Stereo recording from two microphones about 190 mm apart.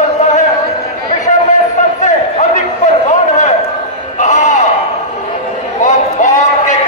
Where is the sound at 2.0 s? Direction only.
40° left (ahead or behind).